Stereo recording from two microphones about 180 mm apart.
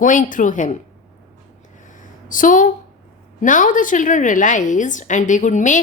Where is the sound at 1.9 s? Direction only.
45° left (ahead or behind).